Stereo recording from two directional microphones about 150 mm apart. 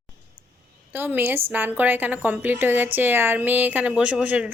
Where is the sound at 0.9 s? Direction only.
15° right (ahead or behind).